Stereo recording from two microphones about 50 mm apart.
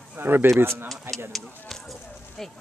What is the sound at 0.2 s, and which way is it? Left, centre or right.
Speech, right.